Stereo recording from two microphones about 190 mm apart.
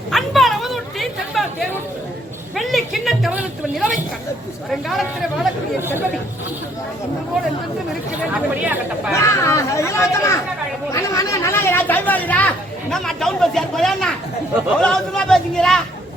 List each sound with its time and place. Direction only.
0.1 s a sound: centre (ahead or behind)
4.7 s speech: centre (ahead or behind)
8.6 s speech: 10° right (ahead or behind)
9.1 s speech: 15° left (ahead or behind)